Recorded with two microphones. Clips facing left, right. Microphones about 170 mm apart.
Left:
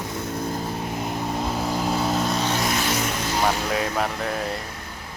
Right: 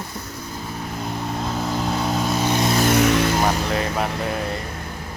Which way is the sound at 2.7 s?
50° right (ahead or behind).